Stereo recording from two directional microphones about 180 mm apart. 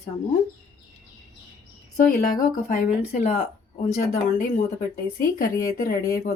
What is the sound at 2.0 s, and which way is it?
Speech, 50° left (ahead or behind).